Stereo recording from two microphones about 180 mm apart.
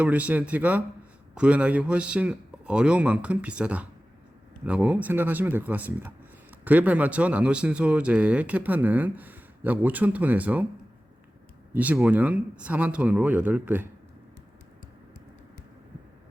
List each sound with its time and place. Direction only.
0.0 s speech: 10° right (ahead or behind)
11.7 s speech: 10° right (ahead or behind)